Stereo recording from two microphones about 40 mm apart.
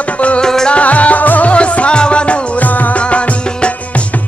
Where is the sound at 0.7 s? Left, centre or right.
Left.